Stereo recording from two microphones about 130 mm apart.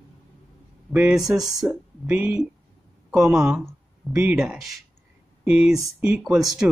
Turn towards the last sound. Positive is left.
turn(degrees=-5)  # may be behind; listen again after turning